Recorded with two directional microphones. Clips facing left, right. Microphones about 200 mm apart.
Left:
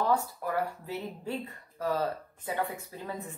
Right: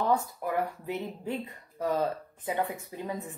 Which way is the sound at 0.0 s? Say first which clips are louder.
Right 1 dB; 15° right (ahead or behind).